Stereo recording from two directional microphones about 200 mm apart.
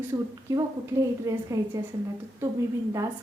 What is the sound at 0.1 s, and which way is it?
A woman's voice, 15° right (ahead or behind).